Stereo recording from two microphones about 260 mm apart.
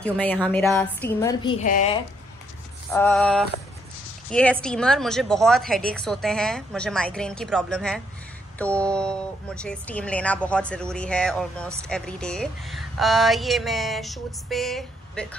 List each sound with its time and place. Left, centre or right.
0.0 s a woman's voice: centre
1.6 s a woman's voice: left
2.9 s speech: centre